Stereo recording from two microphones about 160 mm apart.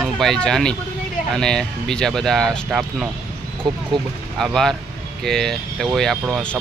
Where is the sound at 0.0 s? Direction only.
5° left (ahead or behind).